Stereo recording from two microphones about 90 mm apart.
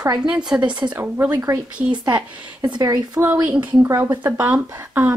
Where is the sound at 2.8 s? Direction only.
40° right (ahead or behind).